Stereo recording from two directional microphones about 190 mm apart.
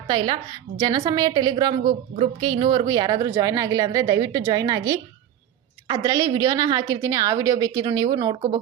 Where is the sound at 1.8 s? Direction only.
50° right (ahead or behind).